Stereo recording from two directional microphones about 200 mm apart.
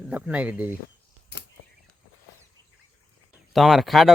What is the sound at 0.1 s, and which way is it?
Speech, 5° right (ahead or behind).